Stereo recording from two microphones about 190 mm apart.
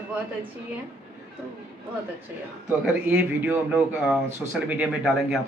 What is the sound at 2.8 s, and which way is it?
A man's voice, 10° right (ahead or behind).